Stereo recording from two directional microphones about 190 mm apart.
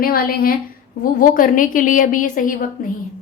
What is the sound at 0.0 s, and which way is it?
A woman's voice, 50° left (ahead or behind).